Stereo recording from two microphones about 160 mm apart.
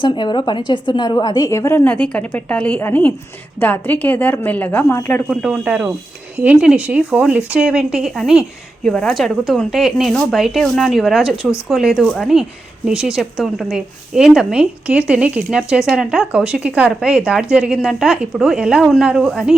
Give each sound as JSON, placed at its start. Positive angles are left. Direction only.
{"t": 0.0, "sound": "a woman's voice", "side_deg": 30}
{"t": 5.4, "sound": "a woman's voice", "side_deg": -5}